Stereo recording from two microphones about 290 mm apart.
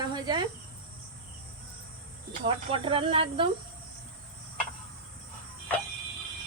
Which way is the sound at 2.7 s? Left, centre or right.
Centre.